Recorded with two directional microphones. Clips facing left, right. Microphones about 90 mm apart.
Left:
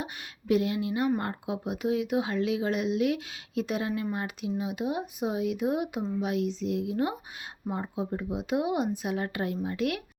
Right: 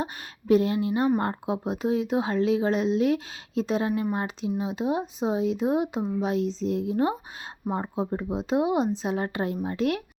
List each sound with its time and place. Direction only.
0.0 s speech: 35° right (ahead or behind)